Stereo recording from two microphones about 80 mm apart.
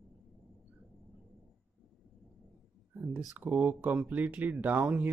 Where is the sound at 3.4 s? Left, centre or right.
Centre.